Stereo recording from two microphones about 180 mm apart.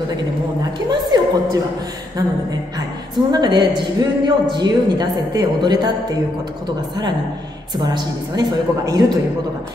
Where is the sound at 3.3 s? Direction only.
25° right (ahead or behind).